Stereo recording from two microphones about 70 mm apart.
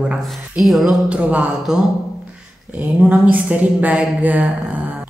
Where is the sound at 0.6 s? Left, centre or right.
Centre.